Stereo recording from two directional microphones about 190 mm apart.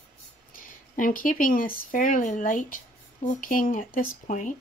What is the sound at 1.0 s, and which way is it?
Speech, 45° left (ahead or behind).